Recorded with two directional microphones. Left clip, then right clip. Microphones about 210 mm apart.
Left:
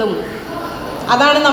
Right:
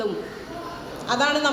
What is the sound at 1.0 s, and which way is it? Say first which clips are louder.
Speech: left 10 dB; 55° right (ahead or behind).